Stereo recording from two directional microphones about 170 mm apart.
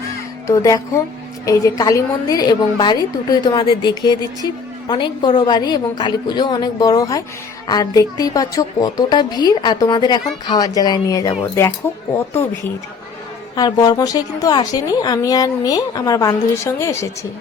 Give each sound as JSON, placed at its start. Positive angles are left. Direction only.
{"t": 0.4, "sound": "a woman's voice", "side_deg": 20}
{"t": 13.6, "sound": "a woman's voice", "side_deg": 25}